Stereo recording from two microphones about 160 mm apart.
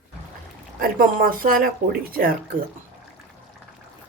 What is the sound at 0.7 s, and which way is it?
Speech, 60° right (ahead or behind).